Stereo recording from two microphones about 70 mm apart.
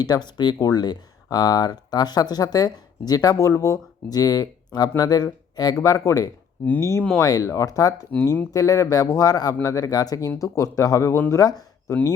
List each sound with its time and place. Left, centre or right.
0.0 s speech: left
5.8 s speech: left
6.7 s speech: left
7.2 s speech: left